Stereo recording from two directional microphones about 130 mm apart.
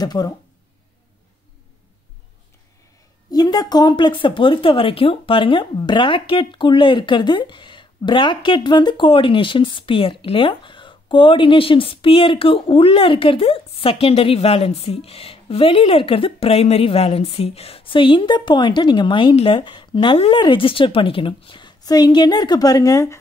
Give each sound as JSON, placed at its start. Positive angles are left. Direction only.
{"t": 0.0, "sound": "speech", "side_deg": 30}
{"t": 3.3, "sound": "speech", "side_deg": 30}